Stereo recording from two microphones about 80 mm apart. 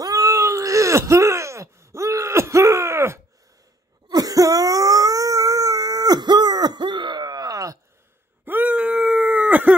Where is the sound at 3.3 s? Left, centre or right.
Right.